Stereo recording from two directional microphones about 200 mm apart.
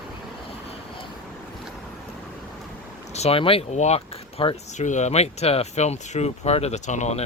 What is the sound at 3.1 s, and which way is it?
Speech, 30° left (ahead or behind).